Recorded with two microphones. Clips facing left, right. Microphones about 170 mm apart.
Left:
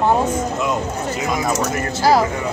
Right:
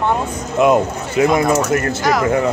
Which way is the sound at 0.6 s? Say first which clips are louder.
Right 12 dB; 60° right (ahead or behind).